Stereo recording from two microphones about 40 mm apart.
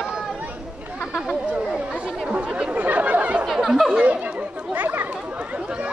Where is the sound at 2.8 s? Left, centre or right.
Right.